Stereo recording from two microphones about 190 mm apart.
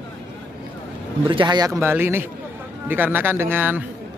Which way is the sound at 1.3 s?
25° right (ahead or behind).